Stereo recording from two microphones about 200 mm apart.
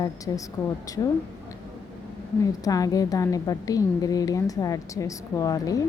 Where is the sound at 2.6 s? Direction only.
20° left (ahead or behind).